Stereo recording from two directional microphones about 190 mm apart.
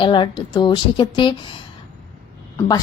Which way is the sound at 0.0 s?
25° left (ahead or behind).